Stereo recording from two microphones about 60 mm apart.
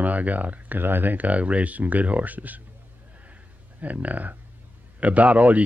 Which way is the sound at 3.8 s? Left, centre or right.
Right.